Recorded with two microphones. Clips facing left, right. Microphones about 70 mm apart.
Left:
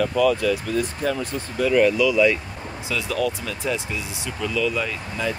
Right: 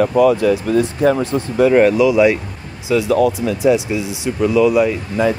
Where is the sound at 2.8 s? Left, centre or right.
Right.